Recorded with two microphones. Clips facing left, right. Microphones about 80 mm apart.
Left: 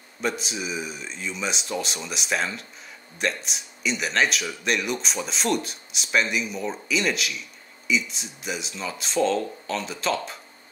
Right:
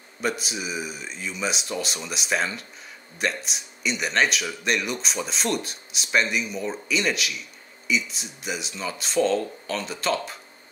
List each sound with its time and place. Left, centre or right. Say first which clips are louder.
0.2 s speech: even; centre